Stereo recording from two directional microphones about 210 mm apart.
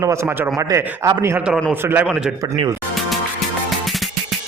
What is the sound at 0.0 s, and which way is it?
A man's voice, 15° right (ahead or behind).